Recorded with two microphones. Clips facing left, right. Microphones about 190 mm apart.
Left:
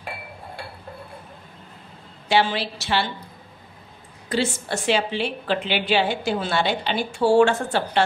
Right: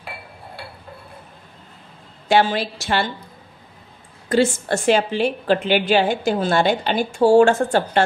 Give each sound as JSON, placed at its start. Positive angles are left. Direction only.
{"t": 2.2, "sound": "a woman's voice", "side_deg": -45}
{"t": 4.3, "sound": "a woman's voice", "side_deg": -50}